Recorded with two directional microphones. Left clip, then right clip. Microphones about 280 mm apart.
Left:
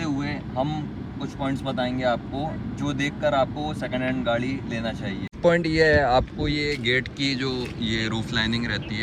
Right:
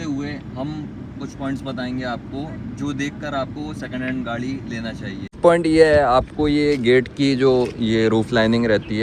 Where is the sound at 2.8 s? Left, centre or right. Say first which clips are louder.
Left 1 dB; left.